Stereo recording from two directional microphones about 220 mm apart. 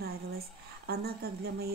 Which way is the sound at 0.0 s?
45° right (ahead or behind).